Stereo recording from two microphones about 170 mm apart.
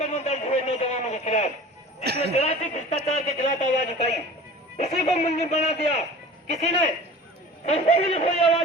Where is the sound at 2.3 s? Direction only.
40° left (ahead or behind).